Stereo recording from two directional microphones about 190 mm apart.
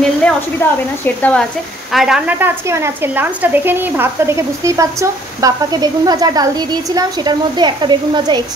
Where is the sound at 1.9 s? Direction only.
Centre (ahead or behind).